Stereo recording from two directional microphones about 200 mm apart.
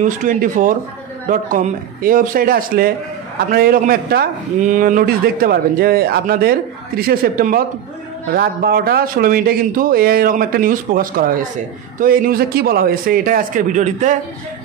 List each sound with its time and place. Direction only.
0.0 s a man's voice: 40° right (ahead or behind)